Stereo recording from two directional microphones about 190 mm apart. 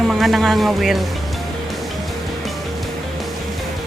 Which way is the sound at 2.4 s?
Centre (ahead or behind).